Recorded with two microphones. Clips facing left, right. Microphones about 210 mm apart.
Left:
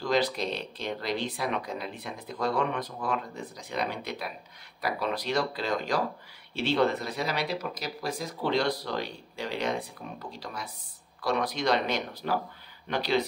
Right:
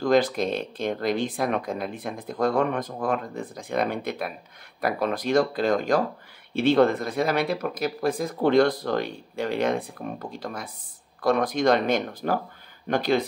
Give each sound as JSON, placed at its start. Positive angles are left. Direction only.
{"t": 0.0, "sound": "speech", "side_deg": -50}